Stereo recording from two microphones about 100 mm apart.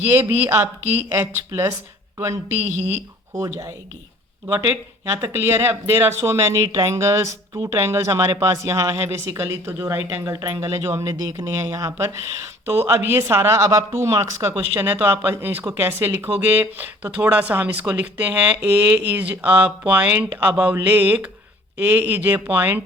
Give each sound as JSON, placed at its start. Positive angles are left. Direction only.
{"t": 0.0, "sound": "a woman's voice", "side_deg": -20}
{"t": 4.4, "sound": "a woman's voice", "side_deg": -15}
{"t": 14.7, "sound": "a woman's voice", "side_deg": -20}